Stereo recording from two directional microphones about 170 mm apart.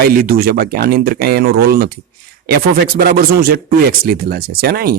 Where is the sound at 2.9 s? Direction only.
60° right (ahead or behind).